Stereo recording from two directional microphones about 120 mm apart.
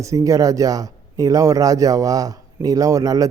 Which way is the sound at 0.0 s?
25° right (ahead or behind).